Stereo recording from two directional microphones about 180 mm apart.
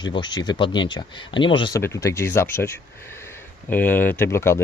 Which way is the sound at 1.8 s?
15° left (ahead or behind).